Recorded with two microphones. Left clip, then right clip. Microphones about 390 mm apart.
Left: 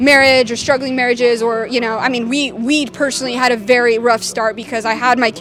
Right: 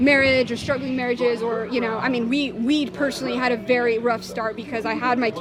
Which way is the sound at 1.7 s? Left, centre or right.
Left.